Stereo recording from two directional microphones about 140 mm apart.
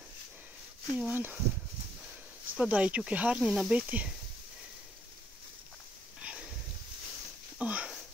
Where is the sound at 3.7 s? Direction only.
10° right (ahead or behind).